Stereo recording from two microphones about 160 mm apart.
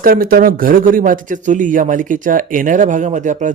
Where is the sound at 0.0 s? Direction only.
65° right (ahead or behind).